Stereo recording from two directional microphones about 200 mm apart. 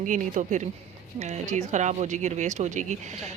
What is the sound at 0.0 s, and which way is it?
Speech, 40° right (ahead or behind).